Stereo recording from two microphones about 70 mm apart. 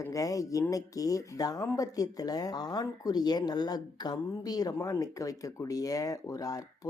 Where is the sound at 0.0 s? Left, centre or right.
Left.